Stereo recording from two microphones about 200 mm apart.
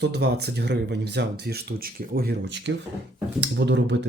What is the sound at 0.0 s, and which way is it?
Speech, 55° right (ahead or behind).